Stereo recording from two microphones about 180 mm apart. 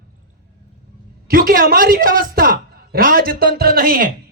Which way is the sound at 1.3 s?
55° right (ahead or behind).